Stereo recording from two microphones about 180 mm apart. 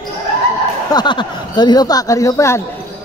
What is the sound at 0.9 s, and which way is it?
Speech, 25° left (ahead or behind).